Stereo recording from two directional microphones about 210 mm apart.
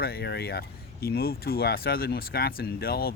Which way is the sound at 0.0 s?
50° left (ahead or behind).